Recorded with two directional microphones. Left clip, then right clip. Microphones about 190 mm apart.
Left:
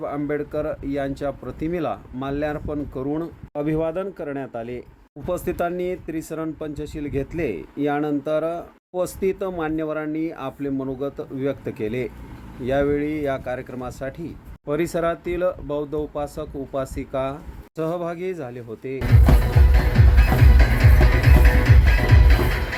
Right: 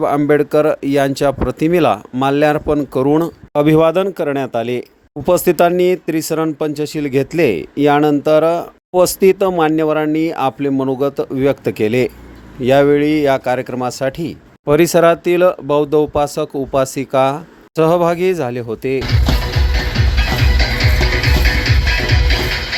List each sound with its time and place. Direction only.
0.0 s speech: 50° right (ahead or behind)
19.7 s music: 30° left (ahead or behind)